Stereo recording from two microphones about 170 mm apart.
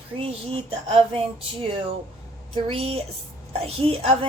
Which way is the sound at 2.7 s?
35° right (ahead or behind).